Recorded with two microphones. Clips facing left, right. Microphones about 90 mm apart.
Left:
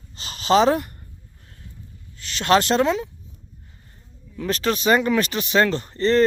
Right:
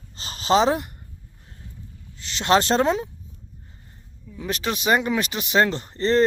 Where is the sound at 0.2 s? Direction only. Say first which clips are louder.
Left 2 dB; 35° right (ahead or behind).